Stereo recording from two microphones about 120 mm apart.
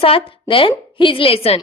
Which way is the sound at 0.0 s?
50° left (ahead or behind).